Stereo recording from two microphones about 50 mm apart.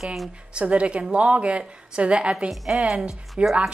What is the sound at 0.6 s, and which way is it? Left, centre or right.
Speech, right.